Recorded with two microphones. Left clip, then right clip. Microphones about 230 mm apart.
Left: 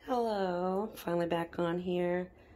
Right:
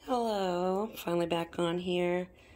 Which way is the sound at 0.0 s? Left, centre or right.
Centre.